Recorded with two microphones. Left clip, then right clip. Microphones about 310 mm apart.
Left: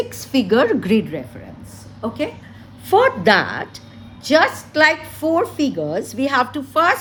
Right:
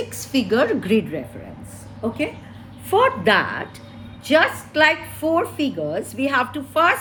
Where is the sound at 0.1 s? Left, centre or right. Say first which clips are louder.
Left 3 dB; left.